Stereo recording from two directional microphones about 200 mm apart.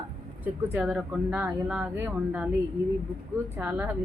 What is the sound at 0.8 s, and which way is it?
Speech, centre (ahead or behind).